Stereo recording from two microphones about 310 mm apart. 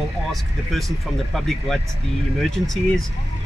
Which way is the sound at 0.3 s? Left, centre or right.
Centre.